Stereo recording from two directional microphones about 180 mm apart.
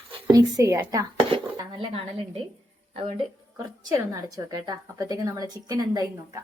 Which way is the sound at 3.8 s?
15° right (ahead or behind).